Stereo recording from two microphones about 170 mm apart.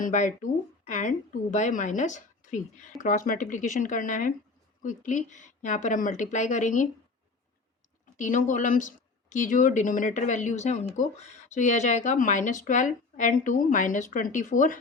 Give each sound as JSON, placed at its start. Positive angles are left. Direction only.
{"t": 0.0, "sound": "speech", "side_deg": 45}
{"t": 8.1, "sound": "speech", "side_deg": 50}